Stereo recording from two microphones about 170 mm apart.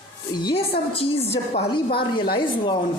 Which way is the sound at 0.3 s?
25° left (ahead or behind).